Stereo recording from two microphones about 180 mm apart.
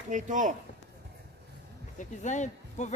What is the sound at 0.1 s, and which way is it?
Speech, 45° right (ahead or behind).